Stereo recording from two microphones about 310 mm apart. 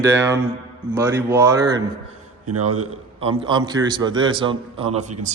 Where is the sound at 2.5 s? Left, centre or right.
Right.